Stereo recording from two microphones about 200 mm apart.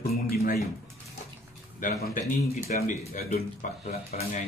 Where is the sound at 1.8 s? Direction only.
40° left (ahead or behind).